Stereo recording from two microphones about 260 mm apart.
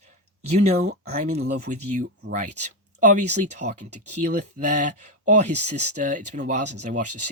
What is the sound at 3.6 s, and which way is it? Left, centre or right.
Speech, right.